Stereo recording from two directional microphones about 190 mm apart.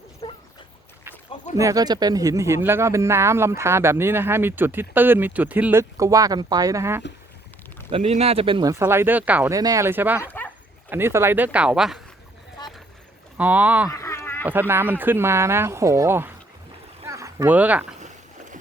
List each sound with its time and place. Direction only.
0.2 s dog: 25° left (ahead or behind)
1.5 s speech: 20° right (ahead or behind)
7.9 s speech: 30° right (ahead or behind)
8.7 s speech: 10° right (ahead or behind)
10.2 s dog: 10° left (ahead or behind)
10.8 s speech: 10° right (ahead or behind)
13.3 s speech: 10° right (ahead or behind)
13.9 s a sound: 15° left (ahead or behind)
14.4 s speech: 10° right (ahead or behind)